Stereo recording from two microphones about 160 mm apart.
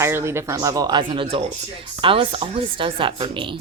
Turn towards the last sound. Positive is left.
turn(degrees=-30)  # may be behind; listen again after turning